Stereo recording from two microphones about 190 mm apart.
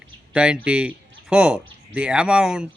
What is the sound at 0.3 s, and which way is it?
Speech, 5° right (ahead or behind).